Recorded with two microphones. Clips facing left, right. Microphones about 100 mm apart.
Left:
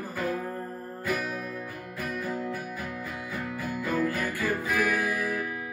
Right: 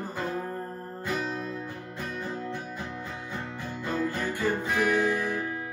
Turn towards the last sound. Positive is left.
turn(degrees=-25)  # may be behind; listen again after turning